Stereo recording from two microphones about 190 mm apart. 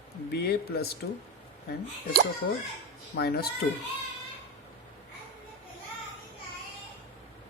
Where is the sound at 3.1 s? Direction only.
55° left (ahead or behind).